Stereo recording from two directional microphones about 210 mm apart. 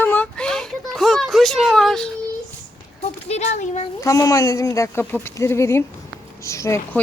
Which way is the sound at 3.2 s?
30° left (ahead or behind).